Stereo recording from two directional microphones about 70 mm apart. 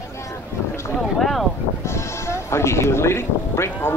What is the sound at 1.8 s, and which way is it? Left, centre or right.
Speech, left.